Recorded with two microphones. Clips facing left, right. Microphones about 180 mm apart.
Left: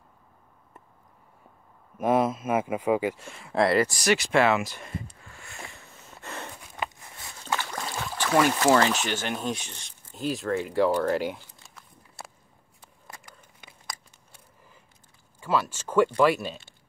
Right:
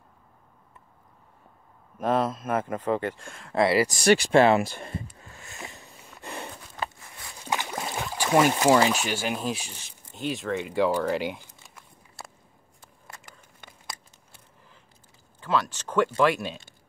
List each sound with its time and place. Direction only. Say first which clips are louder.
2.0 s speech: left 2 dB; 10° left (ahead or behind)
4.0 s a sound: right 4 dB; 30° right (ahead or behind); by 6.5 s 15° right (ahead or behind)
7.4 s speech: right 1 dB; 15° right (ahead or behind); by 11.3 s centre (ahead or behind)
13.6 s tearing: even; 5° left (ahead or behind)
15.4 s speech: even; 10° left (ahead or behind)